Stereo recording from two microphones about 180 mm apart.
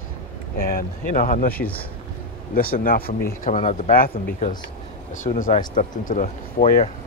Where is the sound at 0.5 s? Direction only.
55° left (ahead or behind).